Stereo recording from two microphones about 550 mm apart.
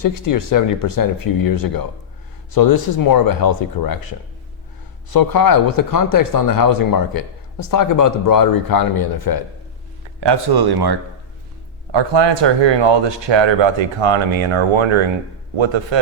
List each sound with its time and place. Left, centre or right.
0.0 s speech: left
5.1 s speech: left
10.2 s speech: right